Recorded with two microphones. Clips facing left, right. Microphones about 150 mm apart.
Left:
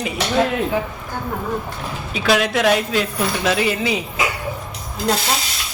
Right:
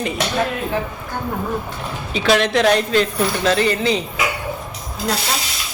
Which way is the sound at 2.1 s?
5° left (ahead or behind).